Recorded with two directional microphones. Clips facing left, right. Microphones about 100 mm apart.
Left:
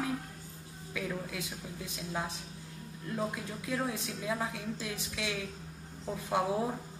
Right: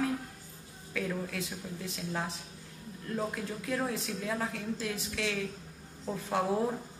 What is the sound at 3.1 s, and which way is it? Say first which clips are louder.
A woman's voice: right 1 dB; 15° left (ahead or behind).